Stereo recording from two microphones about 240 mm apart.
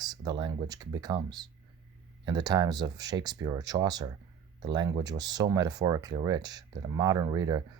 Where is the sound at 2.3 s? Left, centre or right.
Centre.